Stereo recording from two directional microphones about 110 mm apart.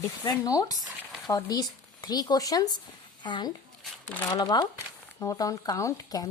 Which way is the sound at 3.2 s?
45° left (ahead or behind).